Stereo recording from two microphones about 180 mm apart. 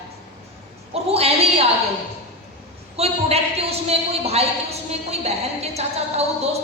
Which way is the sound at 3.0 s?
35° right (ahead or behind).